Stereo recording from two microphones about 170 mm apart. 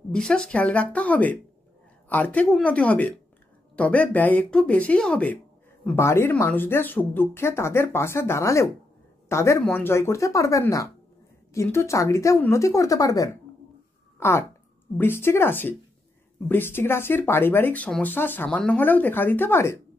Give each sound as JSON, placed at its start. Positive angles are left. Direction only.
{"t": 0.1, "sound": "speech", "side_deg": 5}
{"t": 15.0, "sound": "speech", "side_deg": 15}